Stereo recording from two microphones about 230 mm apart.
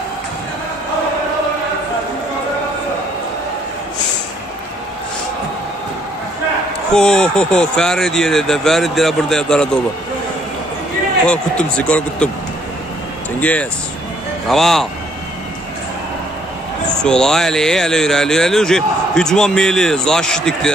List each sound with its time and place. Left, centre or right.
6.9 s speech: centre
11.2 s speech: centre
13.4 s speech: centre
16.9 s speech: centre